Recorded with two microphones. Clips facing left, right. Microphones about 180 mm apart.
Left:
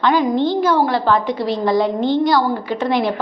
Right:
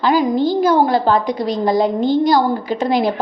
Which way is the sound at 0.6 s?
20° right (ahead or behind).